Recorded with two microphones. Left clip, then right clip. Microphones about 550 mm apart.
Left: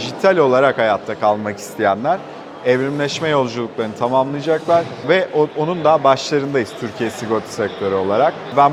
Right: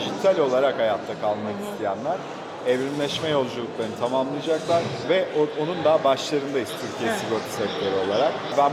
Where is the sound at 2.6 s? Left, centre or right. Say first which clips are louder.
Left 7 dB; left.